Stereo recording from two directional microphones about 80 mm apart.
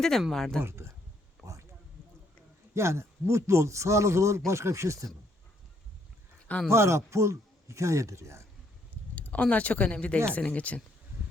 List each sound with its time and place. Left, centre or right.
0.0 s speech: centre
0.6 s speech: right
1.4 s a sound: centre
2.7 s speech: right
6.7 s speech: right
9.1 s speech: centre